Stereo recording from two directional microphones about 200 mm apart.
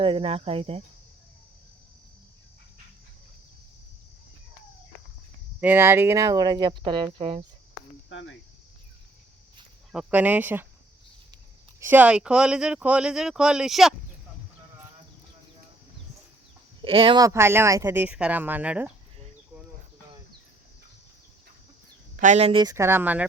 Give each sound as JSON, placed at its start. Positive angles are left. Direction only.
{"t": 0.0, "sound": "speech", "side_deg": -30}
{"t": 5.5, "sound": "speech", "side_deg": -10}
{"t": 8.1, "sound": "cricket", "side_deg": 70}
{"t": 9.9, "sound": "speech", "side_deg": -5}
{"t": 11.8, "sound": "speech", "side_deg": -10}
{"t": 16.8, "sound": "speech", "side_deg": -25}
{"t": 22.1, "sound": "speech", "side_deg": -40}